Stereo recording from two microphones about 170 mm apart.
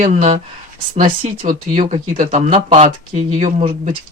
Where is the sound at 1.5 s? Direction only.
50° right (ahead or behind).